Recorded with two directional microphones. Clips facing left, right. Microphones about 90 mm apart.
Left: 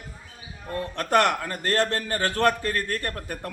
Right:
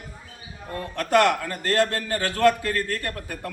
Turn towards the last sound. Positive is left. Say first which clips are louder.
# even
turn(degrees=35)  # may be behind; listen again after turning